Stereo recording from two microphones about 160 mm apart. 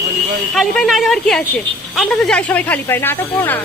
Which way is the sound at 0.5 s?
Centre (ahead or behind).